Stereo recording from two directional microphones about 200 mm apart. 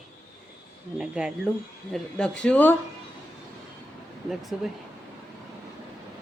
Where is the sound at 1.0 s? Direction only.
5° right (ahead or behind).